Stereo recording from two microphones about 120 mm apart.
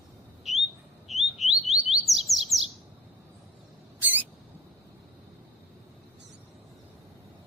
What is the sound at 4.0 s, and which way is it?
Rodents, 15° right (ahead or behind).